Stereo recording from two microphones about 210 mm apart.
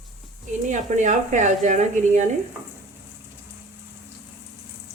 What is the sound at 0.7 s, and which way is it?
A woman's voice, 35° right (ahead or behind).